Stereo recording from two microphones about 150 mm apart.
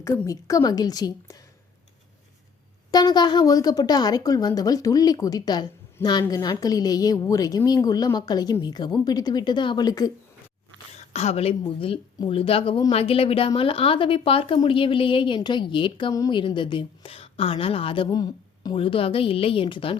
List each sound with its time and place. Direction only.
0.0 s a woman's voice: 20° left (ahead or behind)
2.9 s a woman's voice: 30° left (ahead or behind)
10.9 s a woman's voice: 45° left (ahead or behind)